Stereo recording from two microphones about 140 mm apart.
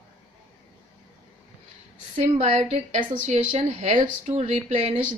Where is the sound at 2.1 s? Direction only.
50° right (ahead or behind).